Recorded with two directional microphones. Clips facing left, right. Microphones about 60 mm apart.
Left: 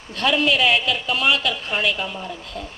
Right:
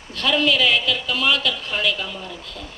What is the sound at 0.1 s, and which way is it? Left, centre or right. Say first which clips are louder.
A woman's voice: even; left.